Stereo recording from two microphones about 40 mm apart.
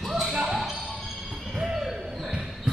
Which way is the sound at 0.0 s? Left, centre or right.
Centre.